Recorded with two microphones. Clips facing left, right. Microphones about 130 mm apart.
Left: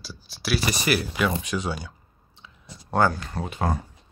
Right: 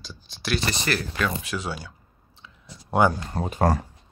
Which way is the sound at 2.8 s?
15° right (ahead or behind).